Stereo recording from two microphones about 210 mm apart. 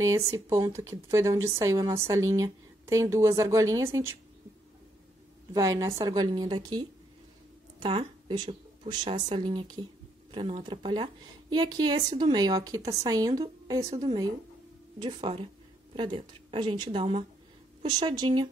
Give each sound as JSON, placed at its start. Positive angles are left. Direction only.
{"t": 0.0, "sound": "speech", "side_deg": -15}
{"t": 5.5, "sound": "a woman's voice", "side_deg": -15}